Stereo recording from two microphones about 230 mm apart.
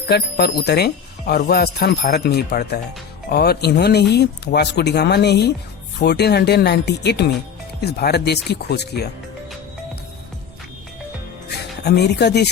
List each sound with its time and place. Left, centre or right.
0.1 s speech: left
11.8 s speech: left